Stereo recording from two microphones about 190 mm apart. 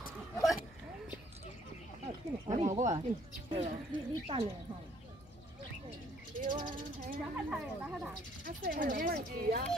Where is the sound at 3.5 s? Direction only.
30° right (ahead or behind).